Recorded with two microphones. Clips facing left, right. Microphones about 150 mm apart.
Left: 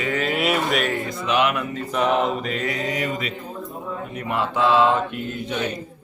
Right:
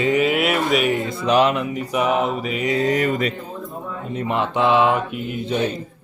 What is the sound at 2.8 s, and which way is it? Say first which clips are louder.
Mantra: right 6 dB; 50° right (ahead or behind).